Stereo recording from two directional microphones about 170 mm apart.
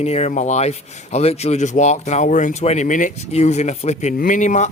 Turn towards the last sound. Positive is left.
turn(degrees=45)  # may be behind; listen again after turning